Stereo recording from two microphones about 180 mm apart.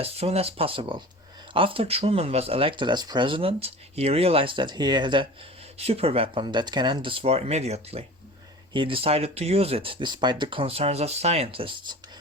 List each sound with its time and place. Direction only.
0.0 s speech: 35° right (ahead or behind)